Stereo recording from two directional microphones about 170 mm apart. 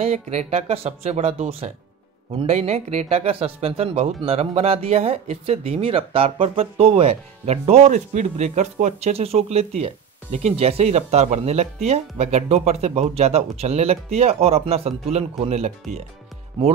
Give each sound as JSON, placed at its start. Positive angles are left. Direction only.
{"t": 0.0, "sound": "speech", "side_deg": -40}